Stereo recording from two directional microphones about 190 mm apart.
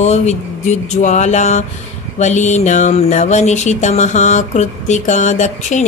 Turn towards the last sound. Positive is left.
turn(degrees=40)  # may be behind; listen again after turning